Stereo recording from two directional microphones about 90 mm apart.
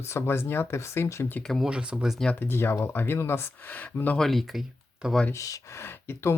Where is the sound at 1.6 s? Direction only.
10° right (ahead or behind).